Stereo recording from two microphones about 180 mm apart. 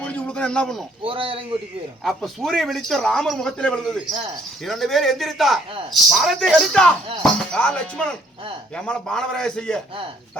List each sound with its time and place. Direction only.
0.0 s a sound: 5° left (ahead or behind)
1.0 s a man's voice: 30° right (ahead or behind)
2.0 s speech: centre (ahead or behind)